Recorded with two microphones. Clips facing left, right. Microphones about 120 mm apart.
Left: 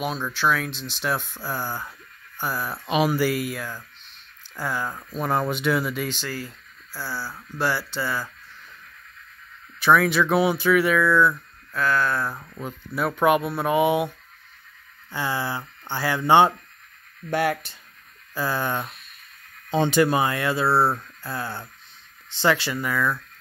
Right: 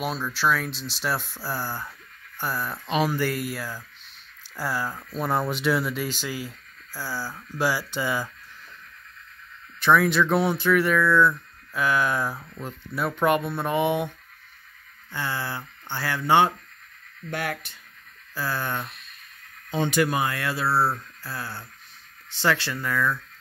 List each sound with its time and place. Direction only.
0.0 s speech: centre (ahead or behind)
2.9 s speech: 15° left (ahead or behind); by 8.3 s 15° right (ahead or behind)
9.8 s speech: 5° left (ahead or behind)
11.7 s speech: 15° right (ahead or behind)
12.5 s speech: centre (ahead or behind)
15.1 s speech: 15° left (ahead or behind); by 17.7 s 30° left (ahead or behind)
18.3 s speech: 15° left (ahead or behind)
19.7 s speech: 30° left (ahead or behind); by 23.1 s 10° left (ahead or behind)